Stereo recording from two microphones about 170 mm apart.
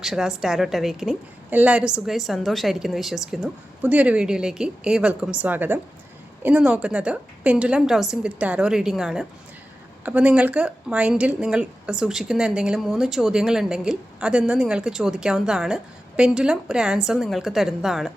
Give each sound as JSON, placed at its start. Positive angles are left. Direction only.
{"t": 0.0, "sound": "speech", "side_deg": 0}